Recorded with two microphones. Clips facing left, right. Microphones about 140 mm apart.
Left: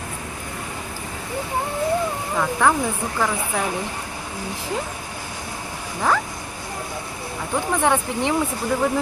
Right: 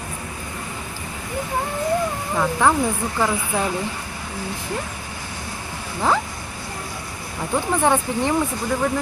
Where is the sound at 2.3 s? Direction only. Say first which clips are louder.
Right 1 dB; 5° right (ahead or behind).